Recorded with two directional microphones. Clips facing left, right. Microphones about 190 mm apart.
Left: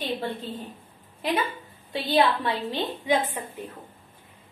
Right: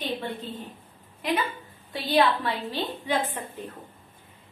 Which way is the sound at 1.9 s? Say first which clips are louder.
Even; 25° left (ahead or behind).